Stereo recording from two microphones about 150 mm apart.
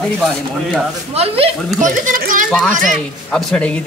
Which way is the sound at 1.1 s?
40° right (ahead or behind).